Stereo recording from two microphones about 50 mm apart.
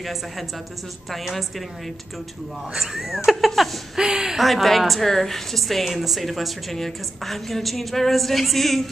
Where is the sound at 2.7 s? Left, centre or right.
Centre.